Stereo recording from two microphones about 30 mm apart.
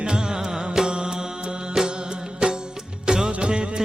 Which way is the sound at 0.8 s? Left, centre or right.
Centre.